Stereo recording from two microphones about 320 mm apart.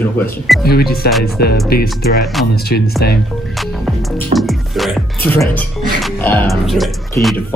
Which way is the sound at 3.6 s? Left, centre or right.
Centre.